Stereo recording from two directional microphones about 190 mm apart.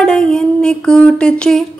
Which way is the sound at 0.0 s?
5° left (ahead or behind).